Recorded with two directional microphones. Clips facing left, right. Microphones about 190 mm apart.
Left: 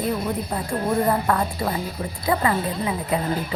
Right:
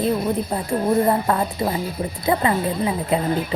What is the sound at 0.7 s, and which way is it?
Speech, 25° right (ahead or behind).